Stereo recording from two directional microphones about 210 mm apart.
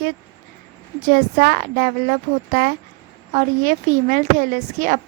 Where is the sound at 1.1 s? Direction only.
40° right (ahead or behind).